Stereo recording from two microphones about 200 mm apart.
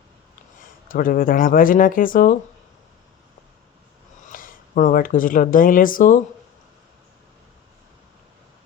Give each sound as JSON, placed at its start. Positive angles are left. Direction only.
{"t": 0.6, "sound": "speech", "side_deg": 45}
{"t": 4.3, "sound": "speech", "side_deg": 45}